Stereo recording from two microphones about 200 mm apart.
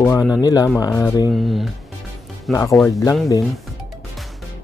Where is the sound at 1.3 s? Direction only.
Centre (ahead or behind).